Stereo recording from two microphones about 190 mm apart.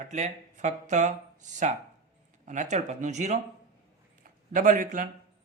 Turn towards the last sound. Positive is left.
turn(degrees=-45)  # may be behind; listen again after turning